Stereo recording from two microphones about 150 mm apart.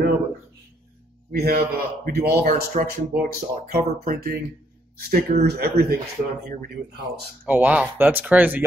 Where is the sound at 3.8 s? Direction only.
75° right (ahead or behind).